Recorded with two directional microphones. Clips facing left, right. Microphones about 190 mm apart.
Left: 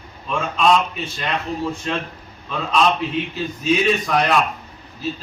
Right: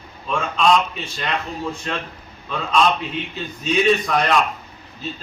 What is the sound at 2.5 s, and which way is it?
A man's voice, 5° left (ahead or behind).